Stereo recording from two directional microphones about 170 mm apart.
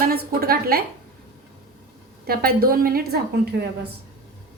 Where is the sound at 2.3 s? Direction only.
60° right (ahead or behind).